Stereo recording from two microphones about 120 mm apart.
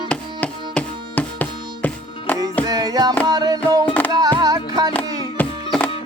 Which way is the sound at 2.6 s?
30° right (ahead or behind).